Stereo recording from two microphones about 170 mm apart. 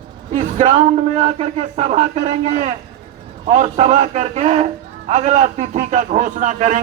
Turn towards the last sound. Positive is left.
turn(degrees=-45)  # may be behind; listen again after turning